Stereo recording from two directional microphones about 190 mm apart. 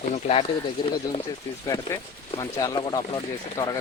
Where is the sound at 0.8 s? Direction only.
20° left (ahead or behind).